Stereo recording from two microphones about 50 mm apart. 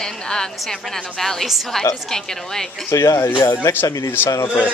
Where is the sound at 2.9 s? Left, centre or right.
Left.